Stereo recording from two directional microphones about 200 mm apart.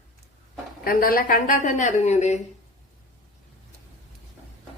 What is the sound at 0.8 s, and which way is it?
A woman's voice, 45° left (ahead or behind).